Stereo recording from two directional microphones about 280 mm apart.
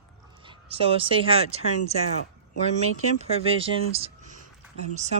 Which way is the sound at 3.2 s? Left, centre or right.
Right.